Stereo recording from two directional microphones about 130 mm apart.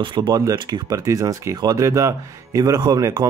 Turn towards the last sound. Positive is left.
turn(degrees=-30)  # may be behind; listen again after turning